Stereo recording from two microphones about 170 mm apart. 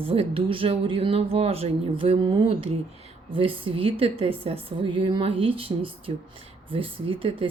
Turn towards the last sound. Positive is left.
turn(degrees=-30)  # may be behind; listen again after turning